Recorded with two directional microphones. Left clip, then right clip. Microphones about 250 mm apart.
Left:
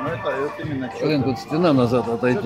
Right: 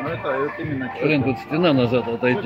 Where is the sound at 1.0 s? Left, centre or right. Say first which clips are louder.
Right 1 dB; centre.